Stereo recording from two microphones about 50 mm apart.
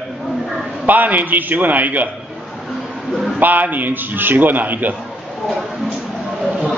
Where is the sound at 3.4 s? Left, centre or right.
Right.